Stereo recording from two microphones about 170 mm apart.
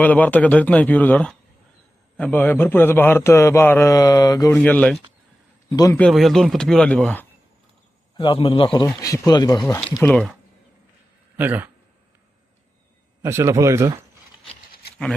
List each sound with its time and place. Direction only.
0.0 s a man's voice: 10° left (ahead or behind)
4.5 s a man's voice: 10° left (ahead or behind)
5.7 s a man's voice: 20° left (ahead or behind)
6.0 s speech: centre (ahead or behind)
8.1 s a man's voice: 30° left (ahead or behind)
10.1 s speech: 5° left (ahead or behind)
11.3 s speech: 10° right (ahead or behind)
13.2 s speech: 15° right (ahead or behind)